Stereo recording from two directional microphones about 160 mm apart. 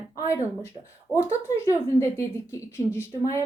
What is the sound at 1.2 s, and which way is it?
A woman's voice, 20° left (ahead or behind).